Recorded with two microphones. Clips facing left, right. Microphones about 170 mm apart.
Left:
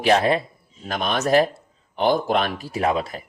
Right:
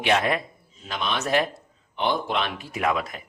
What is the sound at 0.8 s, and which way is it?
A man's voice, 45° left (ahead or behind).